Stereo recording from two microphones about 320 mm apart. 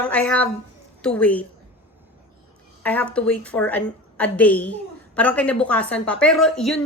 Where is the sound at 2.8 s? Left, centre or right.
Centre.